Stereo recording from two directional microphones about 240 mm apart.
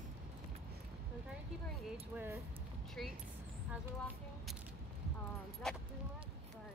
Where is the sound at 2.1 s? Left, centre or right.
Centre.